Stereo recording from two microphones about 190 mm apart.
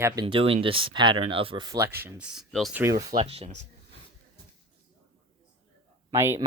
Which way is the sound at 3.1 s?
30° right (ahead or behind).